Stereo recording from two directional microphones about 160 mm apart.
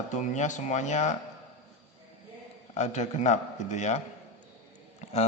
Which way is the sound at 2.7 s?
45° left (ahead or behind).